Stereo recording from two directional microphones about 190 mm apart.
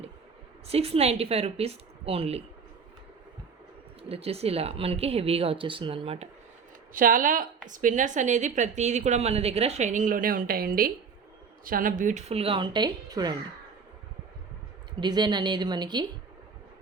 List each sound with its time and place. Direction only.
0.7 s a woman's voice: 30° right (ahead or behind)
4.1 s a woman's voice: 30° right (ahead or behind)
6.9 s a woman's voice: 45° right (ahead or behind); by 13.3 s 20° right (ahead or behind)
15.0 s a woman's voice: 20° right (ahead or behind)